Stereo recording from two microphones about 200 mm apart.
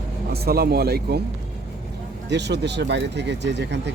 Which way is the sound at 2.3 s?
60° right (ahead or behind).